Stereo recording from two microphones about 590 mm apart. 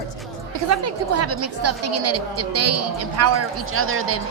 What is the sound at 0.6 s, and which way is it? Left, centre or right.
A woman's voice, right.